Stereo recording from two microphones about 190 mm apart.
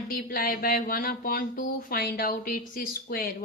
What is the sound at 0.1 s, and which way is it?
Speech, 50° left (ahead or behind).